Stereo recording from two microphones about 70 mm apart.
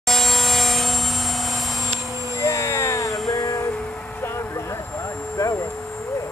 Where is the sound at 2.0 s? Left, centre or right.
Right.